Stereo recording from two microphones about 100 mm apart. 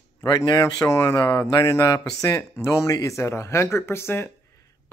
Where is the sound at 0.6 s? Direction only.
30° left (ahead or behind).